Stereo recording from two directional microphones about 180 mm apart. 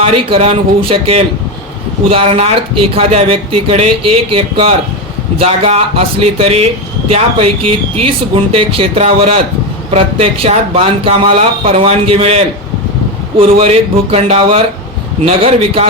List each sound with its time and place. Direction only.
0.0 s speech: 30° right (ahead or behind)
8.5 s speech: 30° right (ahead or behind)